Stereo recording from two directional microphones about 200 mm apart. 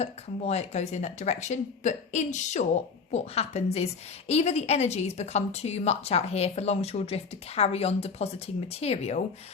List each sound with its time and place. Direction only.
0.0 s speech: 30° left (ahead or behind)